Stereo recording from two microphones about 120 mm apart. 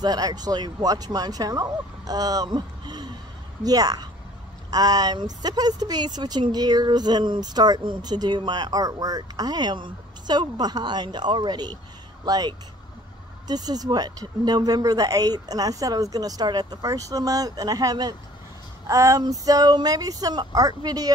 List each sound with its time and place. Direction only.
0.0 s speech: 35° right (ahead or behind)